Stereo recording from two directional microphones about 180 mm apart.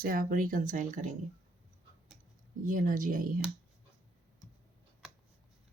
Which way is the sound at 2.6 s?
50° right (ahead or behind).